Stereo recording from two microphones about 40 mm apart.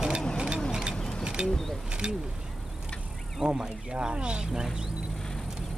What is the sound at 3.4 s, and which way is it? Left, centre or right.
Speech, right.